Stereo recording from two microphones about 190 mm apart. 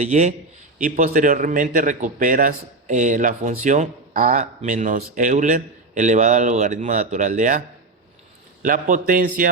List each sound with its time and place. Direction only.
0.0 s a man's voice: 40° right (ahead or behind)
8.6 s a man's voice: 45° right (ahead or behind)